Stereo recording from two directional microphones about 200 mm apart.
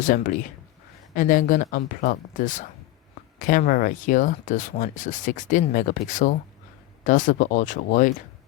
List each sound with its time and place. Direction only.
0.0 s speech: 40° left (ahead or behind)